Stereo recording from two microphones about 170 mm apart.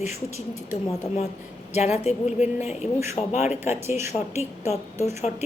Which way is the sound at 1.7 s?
40° left (ahead or behind).